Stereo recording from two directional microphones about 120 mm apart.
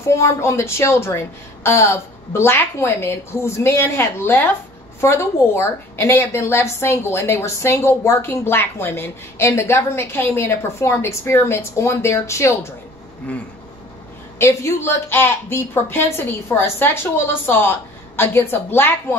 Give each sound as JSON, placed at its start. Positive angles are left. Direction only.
{"t": 0.1, "sound": "a woman's voice", "side_deg": 25}
{"t": 14.4, "sound": "a woman's voice", "side_deg": 20}